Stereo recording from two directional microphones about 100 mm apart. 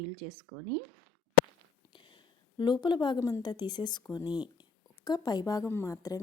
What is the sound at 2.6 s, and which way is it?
Speech, 50° left (ahead or behind).